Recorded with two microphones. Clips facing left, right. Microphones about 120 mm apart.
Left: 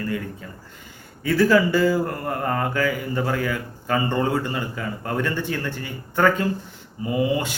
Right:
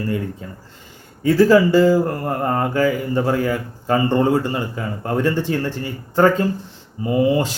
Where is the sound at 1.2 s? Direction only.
30° right (ahead or behind).